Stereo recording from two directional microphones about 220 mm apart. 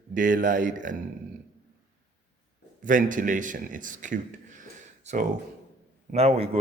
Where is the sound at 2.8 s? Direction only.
35° right (ahead or behind).